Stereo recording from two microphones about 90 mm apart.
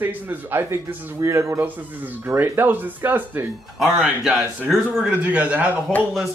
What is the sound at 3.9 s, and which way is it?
Speech, 10° right (ahead or behind).